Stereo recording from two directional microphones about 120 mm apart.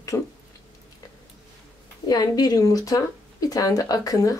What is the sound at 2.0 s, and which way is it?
Speech, 35° left (ahead or behind).